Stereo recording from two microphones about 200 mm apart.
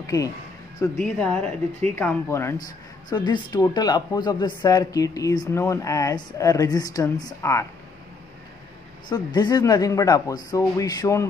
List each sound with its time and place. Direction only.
0.0 s speech: 15° left (ahead or behind)
0.9 s a woman's voice: 5° left (ahead or behind)
9.1 s speech: 20° left (ahead or behind)